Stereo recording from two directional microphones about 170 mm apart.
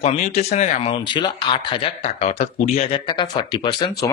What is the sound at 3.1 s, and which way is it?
Speech, 25° left (ahead or behind).